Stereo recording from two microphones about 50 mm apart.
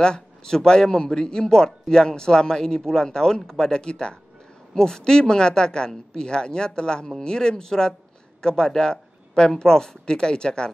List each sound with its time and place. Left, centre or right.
0.0 s a man's voice: centre